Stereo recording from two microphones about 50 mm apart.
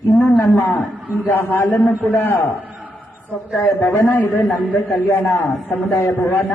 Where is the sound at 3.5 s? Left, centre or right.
Left.